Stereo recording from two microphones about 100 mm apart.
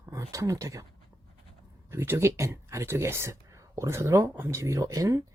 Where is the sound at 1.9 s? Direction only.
25° right (ahead or behind).